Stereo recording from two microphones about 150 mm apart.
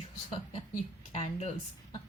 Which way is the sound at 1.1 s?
45° left (ahead or behind).